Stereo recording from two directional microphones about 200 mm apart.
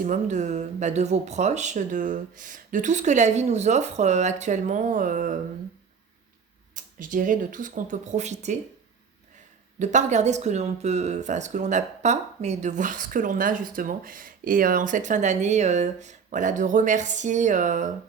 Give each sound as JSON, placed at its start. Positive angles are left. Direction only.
{"t": 0.0, "sound": "speech", "side_deg": -40}
{"t": 6.7, "sound": "speech", "side_deg": -40}
{"t": 9.7, "sound": "speech", "side_deg": -35}